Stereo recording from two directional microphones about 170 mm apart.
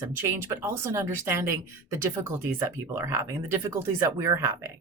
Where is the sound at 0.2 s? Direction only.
15° right (ahead or behind).